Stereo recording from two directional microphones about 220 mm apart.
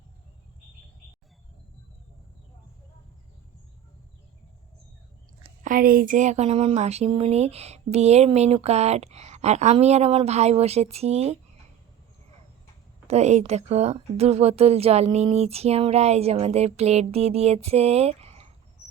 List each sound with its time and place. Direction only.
5.6 s speech: 40° right (ahead or behind)
13.1 s speech: 30° right (ahead or behind)